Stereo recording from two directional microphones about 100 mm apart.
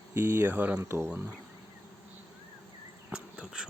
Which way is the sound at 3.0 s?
10° right (ahead or behind).